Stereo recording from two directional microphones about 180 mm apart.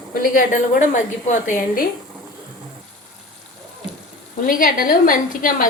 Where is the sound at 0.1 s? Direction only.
50° left (ahead or behind).